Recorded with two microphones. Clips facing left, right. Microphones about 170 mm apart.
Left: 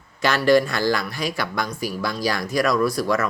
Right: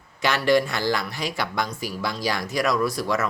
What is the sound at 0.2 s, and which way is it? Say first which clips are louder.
Speech: left 3 dB; 20° right (ahead or behind).